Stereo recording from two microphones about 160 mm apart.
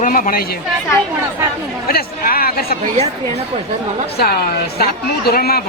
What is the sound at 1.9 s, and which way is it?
Speech, 70° left (ahead or behind).